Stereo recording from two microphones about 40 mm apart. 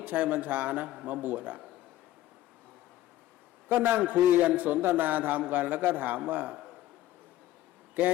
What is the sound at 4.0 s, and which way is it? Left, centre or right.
Speech, right.